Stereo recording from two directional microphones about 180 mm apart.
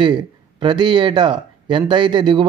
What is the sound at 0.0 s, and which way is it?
A man's voice, 25° right (ahead or behind).